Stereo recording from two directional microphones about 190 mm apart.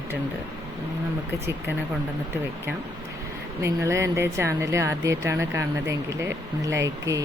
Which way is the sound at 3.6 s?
15° right (ahead or behind).